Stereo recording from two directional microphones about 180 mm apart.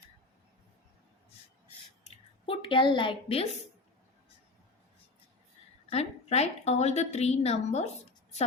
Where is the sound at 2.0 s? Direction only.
30° left (ahead or behind).